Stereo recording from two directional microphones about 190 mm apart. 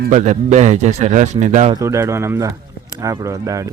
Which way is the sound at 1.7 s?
15° right (ahead or behind).